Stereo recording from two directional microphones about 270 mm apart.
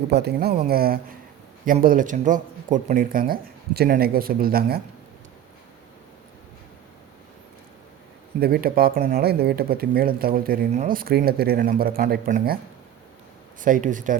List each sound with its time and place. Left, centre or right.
0.1 s speech: right
8.4 s speech: right
13.6 s speech: right